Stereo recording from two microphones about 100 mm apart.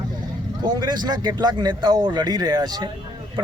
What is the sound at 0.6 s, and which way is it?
A man's voice, 45° right (ahead or behind).